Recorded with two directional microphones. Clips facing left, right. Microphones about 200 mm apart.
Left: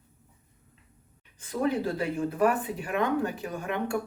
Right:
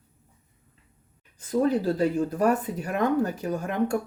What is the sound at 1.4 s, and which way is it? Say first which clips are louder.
Speech: right 4 dB; 35° right (ahead or behind).